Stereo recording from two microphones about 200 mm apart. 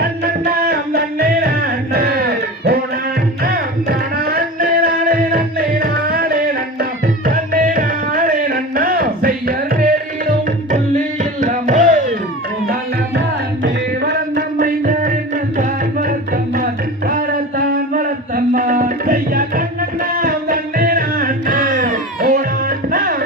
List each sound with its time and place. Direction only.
0.4 s music: 50° right (ahead or behind)
13.6 s music: 50° right (ahead or behind)
18.3 s music: 45° right (ahead or behind)